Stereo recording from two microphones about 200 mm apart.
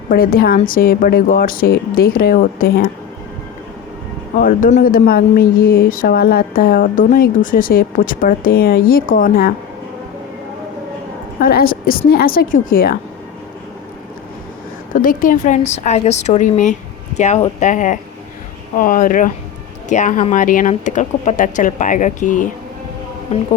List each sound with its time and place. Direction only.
0.1 s speech: 45° left (ahead or behind)
4.4 s speech: 45° left (ahead or behind)
11.3 s speech: 45° left (ahead or behind)
14.9 s speech: 45° left (ahead or behind)